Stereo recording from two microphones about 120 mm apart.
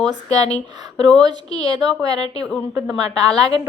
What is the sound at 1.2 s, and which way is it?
A woman's voice, 35° right (ahead or behind).